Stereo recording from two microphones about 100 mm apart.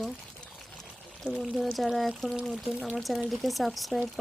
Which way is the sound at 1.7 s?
Centre (ahead or behind).